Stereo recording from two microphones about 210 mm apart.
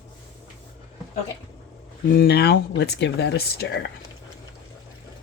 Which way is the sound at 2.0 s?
45° left (ahead or behind).